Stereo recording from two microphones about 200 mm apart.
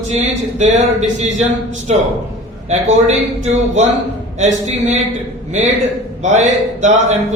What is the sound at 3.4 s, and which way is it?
A man's voice, 35° right (ahead or behind).